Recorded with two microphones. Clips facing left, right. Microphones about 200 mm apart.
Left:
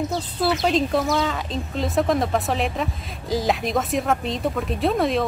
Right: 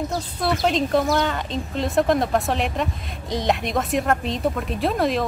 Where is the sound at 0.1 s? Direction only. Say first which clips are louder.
Left 1 dB; centre (ahead or behind).